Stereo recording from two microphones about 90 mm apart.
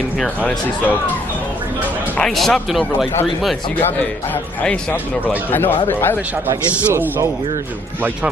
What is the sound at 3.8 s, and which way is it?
Speech, 20° left (ahead or behind).